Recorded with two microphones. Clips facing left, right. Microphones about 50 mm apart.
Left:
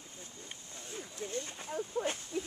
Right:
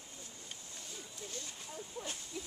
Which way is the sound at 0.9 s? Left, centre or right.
Left.